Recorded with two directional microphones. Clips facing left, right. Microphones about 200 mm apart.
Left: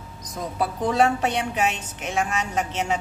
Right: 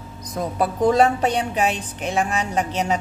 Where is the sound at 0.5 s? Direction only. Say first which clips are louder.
Right 5 dB; 40° right (ahead or behind).